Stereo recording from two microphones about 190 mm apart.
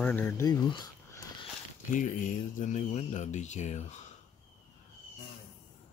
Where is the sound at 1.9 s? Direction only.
45° left (ahead or behind).